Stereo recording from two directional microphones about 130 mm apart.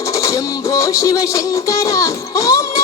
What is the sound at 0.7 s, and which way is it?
Music, 25° left (ahead or behind).